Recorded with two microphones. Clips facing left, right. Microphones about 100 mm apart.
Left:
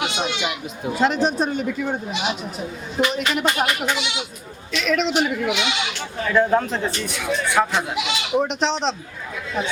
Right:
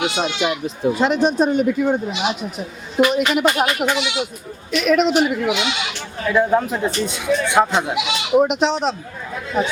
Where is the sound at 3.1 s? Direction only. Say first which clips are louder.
Right 5 dB; 10° right (ahead or behind).